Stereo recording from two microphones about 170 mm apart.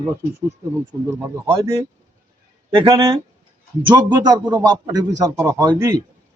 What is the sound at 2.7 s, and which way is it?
A man's voice, 30° right (ahead or behind).